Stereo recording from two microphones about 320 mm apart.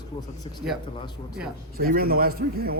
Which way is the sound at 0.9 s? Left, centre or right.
Centre.